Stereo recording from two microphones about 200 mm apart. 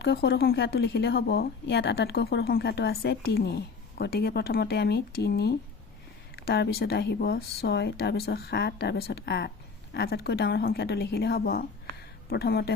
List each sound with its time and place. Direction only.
0.0 s a woman's voice: 55° left (ahead or behind)